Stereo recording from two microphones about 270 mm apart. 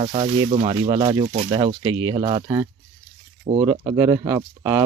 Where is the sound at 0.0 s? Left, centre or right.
Right.